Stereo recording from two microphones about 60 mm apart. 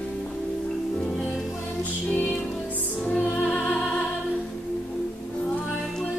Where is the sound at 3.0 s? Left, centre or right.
Left.